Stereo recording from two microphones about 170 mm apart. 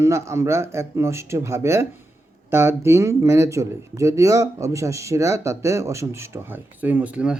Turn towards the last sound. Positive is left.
turn(degrees=-5)  # may be behind; listen again after turning